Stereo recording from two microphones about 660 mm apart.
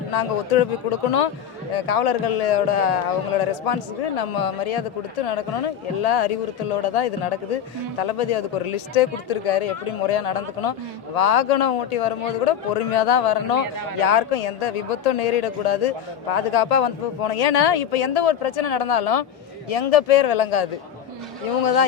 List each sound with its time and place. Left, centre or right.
0.1 s speech: left